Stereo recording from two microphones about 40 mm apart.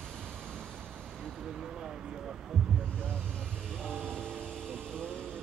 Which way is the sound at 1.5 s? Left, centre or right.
Centre.